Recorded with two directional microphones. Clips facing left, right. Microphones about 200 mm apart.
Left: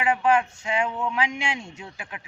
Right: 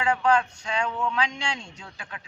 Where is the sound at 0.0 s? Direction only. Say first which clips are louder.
Left 1 dB; 20° left (ahead or behind).